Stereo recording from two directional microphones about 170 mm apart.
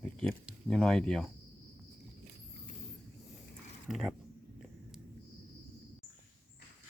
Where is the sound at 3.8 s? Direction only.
Centre (ahead or behind).